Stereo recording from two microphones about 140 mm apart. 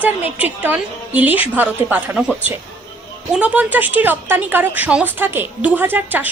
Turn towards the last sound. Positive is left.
turn(degrees=-15)  # may be behind; listen again after turning